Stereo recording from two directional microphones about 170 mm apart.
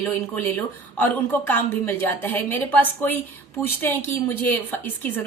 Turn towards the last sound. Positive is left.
turn(degrees=10)  # may be behind; listen again after turning